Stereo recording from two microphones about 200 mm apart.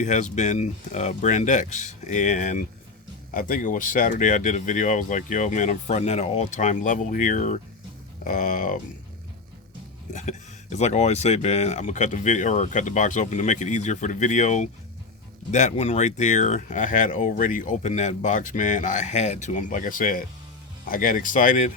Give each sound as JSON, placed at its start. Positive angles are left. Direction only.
{"t": 0.0, "sound": "speech", "side_deg": 35}
{"t": 10.1, "sound": "speech", "side_deg": 35}